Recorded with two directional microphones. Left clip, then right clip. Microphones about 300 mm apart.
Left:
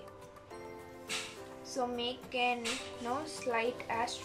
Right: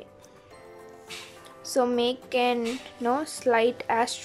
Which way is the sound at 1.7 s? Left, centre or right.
Right.